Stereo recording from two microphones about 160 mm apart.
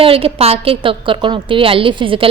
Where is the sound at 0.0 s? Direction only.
35° right (ahead or behind).